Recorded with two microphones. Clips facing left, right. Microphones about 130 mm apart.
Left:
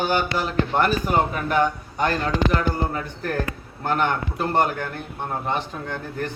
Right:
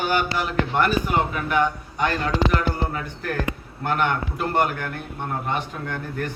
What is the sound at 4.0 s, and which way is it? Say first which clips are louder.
A man's voice: even; 30° left (ahead or behind).